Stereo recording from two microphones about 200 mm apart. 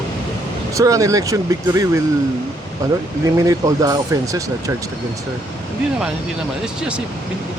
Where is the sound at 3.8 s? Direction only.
15° right (ahead or behind).